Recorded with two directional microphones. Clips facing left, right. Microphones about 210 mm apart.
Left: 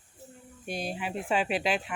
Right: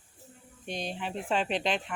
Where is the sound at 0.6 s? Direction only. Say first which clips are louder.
Left 1 dB; 5° left (ahead or behind).